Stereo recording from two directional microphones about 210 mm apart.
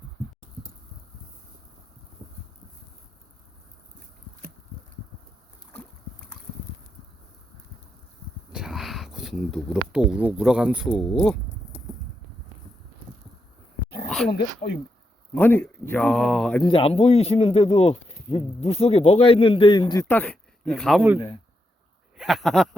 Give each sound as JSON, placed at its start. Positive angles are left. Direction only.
{"t": 8.5, "sound": "speech", "side_deg": 0}
{"t": 14.6, "sound": "speech", "side_deg": 35}
{"t": 15.4, "sound": "speech", "side_deg": 10}
{"t": 16.6, "sound": "speech", "side_deg": 25}
{"t": 22.2, "sound": "speech", "side_deg": 0}